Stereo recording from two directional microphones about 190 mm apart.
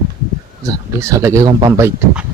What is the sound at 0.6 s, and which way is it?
Speech, 15° right (ahead or behind).